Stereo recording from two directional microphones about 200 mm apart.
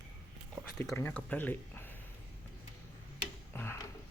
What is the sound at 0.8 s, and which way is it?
Speech, 10° left (ahead or behind).